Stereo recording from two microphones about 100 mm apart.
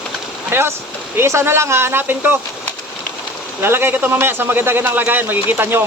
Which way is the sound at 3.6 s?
25° right (ahead or behind).